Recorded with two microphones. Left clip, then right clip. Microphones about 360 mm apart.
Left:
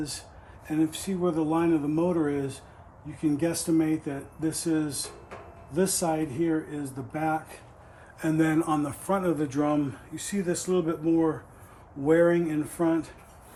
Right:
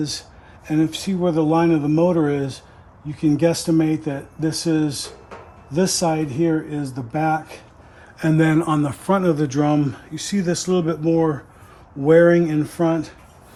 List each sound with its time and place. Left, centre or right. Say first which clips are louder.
0.6 s speech: right 7 dB; right